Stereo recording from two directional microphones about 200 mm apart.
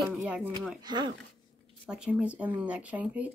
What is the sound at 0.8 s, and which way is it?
Speech, 20° right (ahead or behind).